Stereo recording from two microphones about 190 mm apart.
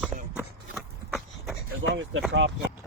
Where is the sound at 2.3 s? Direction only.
70° right (ahead or behind).